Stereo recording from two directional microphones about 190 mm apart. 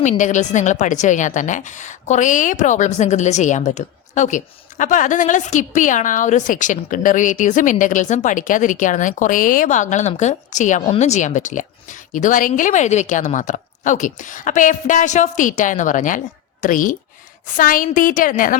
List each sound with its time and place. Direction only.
0.0 s a woman's voice: 40° left (ahead or behind)